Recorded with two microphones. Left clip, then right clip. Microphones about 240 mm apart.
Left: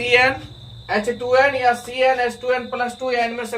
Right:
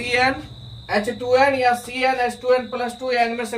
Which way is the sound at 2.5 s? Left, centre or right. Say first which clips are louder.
Right 1 dB; centre.